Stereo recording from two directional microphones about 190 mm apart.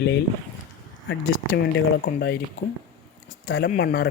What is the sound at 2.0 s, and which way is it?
Speech, 65° left (ahead or behind).